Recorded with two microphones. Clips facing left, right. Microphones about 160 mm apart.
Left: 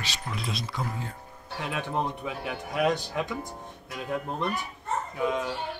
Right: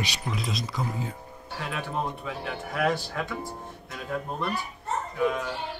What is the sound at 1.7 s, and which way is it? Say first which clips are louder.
Speech: left 1 dB; 20° left (ahead or behind).